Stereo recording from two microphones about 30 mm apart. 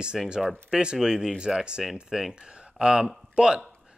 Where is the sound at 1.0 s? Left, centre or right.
Right.